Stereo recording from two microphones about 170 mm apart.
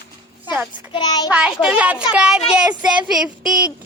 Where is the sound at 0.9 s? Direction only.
25° left (ahead or behind).